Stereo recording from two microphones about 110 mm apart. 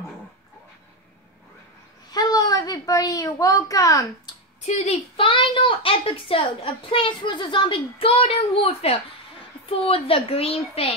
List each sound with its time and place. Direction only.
2.0 s a sound: 35° left (ahead or behind)
4.6 s speech: 90° left
5.1 s a child's voice: 50° left (ahead or behind)